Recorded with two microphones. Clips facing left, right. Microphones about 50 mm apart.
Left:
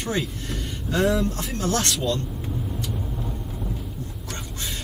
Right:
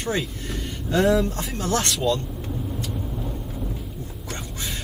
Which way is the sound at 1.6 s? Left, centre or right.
Right.